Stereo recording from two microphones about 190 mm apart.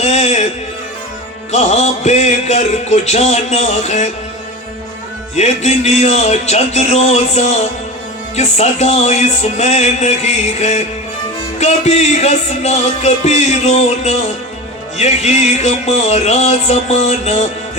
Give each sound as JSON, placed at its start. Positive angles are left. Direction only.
{"t": 0.0, "sound": "music", "side_deg": 35}
{"t": 1.5, "sound": "music", "side_deg": 35}
{"t": 5.4, "sound": "music", "side_deg": 35}